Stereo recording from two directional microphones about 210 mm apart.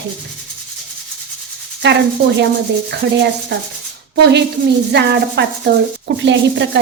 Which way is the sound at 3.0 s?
55° right (ahead or behind).